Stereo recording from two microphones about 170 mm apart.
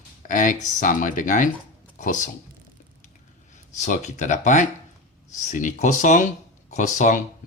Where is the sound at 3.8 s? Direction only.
45° left (ahead or behind).